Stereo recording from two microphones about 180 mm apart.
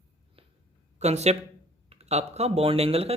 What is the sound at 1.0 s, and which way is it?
Speech, 40° right (ahead or behind).